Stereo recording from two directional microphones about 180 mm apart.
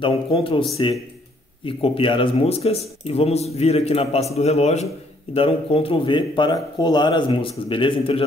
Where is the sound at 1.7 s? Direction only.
30° left (ahead or behind).